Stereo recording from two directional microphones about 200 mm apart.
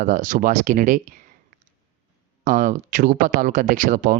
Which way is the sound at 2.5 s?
40° right (ahead or behind).